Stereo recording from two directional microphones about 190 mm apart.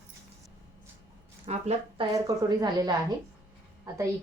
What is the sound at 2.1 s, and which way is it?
A woman's voice, 20° right (ahead or behind).